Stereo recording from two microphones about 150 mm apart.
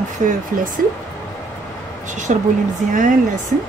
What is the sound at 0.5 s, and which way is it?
Speech, 65° right (ahead or behind).